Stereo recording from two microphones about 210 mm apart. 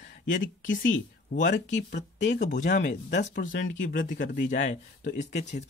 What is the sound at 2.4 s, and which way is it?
Speech, 35° left (ahead or behind).